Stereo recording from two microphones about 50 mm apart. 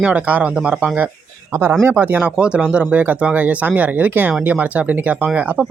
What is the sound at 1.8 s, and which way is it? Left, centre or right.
Speech, right.